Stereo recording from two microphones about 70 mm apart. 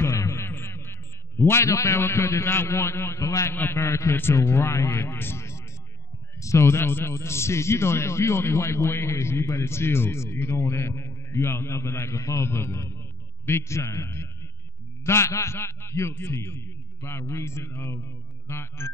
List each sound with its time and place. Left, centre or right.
0.0 s music: left
0.5 s a sound: left
1.4 s speech: left
3.5 s speech: left
3.8 s a man's voice: left
4.1 s a man's voice: left
12.4 s speech: left
13.9 s a man's voice: left
18.5 s speech: left